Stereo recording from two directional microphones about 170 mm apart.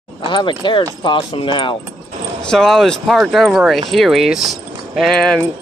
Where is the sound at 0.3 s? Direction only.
25° left (ahead or behind).